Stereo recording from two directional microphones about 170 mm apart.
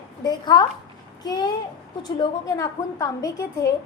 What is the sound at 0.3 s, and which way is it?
A woman's voice, 25° left (ahead or behind).